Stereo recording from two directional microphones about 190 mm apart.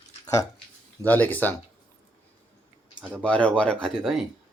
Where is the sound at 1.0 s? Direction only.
10° left (ahead or behind).